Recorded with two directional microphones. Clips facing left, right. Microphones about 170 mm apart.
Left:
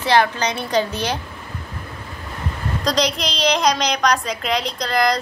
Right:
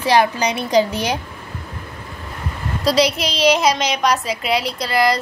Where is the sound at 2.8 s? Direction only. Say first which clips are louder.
Right 4 dB; 5° right (ahead or behind).